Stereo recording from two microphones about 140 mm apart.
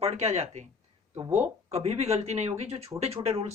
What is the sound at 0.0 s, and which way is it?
Speech, 50° right (ahead or behind).